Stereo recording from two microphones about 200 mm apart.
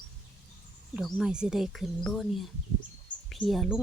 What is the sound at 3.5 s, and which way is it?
Speech, centre (ahead or behind).